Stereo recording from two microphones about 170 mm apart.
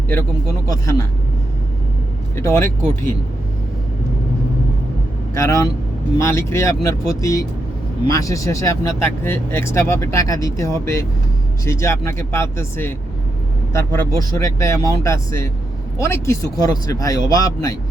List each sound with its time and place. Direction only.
0.7 s speech: 15° left (ahead or behind)
2.3 s speech: 15° left (ahead or behind)
5.3 s speech: 20° left (ahead or behind)